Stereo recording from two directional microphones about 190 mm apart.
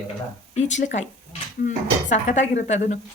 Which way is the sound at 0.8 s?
40° left (ahead or behind).